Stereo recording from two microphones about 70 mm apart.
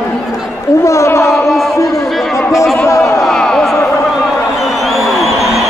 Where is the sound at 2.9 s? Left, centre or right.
Left.